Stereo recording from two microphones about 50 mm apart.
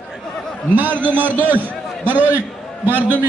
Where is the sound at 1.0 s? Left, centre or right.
Right.